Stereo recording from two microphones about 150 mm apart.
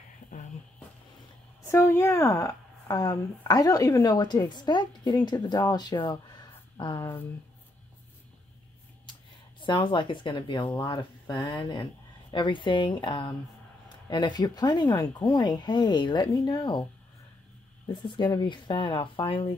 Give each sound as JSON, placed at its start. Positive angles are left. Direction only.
{"t": 1.7, "sound": "speech", "side_deg": 15}
{"t": 7.0, "sound": "speech", "side_deg": 15}
{"t": 9.6, "sound": "speech", "side_deg": 30}
{"t": 18.0, "sound": "speech", "side_deg": 30}